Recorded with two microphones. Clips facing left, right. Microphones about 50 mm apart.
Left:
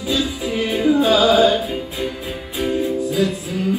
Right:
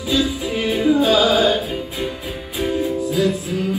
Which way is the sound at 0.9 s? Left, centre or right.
Left.